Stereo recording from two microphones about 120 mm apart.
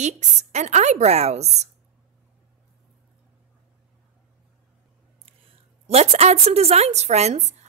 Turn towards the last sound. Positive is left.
turn(degrees=-65)  # may be behind; listen again after turning